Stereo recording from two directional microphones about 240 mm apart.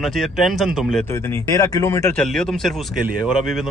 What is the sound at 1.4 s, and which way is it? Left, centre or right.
Speech, centre.